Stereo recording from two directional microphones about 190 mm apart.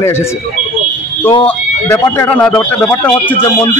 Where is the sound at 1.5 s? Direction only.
10° left (ahead or behind).